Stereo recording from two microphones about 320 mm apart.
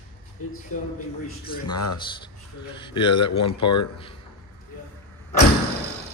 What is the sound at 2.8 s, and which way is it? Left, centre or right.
Speech, centre.